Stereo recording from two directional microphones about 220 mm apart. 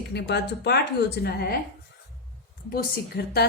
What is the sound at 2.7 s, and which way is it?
Speech, 45° left (ahead or behind).